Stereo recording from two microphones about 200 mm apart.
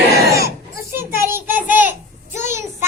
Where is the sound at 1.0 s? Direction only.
10° right (ahead or behind).